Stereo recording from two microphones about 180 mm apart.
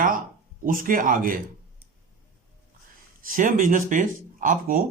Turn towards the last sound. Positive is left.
turn(degrees=-45)  # may be behind; listen again after turning